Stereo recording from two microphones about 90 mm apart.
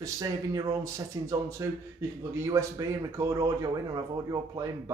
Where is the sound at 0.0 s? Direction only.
40° right (ahead or behind).